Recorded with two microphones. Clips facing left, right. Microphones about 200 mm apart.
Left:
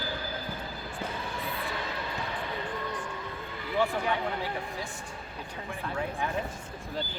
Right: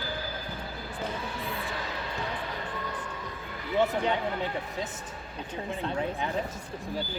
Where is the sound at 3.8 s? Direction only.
20° right (ahead or behind).